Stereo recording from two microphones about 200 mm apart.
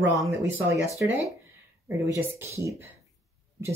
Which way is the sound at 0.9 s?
10° right (ahead or behind).